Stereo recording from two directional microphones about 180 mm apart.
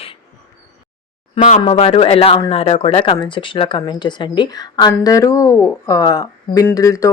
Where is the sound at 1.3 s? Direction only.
45° left (ahead or behind).